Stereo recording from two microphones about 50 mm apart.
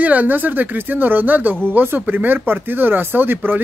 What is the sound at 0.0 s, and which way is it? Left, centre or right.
Speech, right.